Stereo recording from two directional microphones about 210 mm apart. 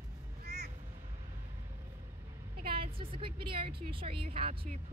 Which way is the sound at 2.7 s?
25° right (ahead or behind).